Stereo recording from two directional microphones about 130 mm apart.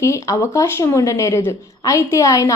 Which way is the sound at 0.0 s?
20° left (ahead or behind).